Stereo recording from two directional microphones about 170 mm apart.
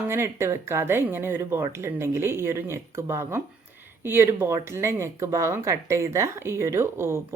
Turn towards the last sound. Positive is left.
turn(degrees=-15)  # may be behind; listen again after turning